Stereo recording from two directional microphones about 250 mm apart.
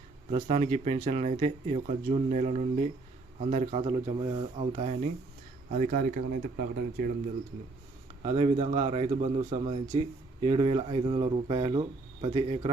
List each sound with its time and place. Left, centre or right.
0.3 s speech: right
5.7 s speech: right
8.2 s speech: right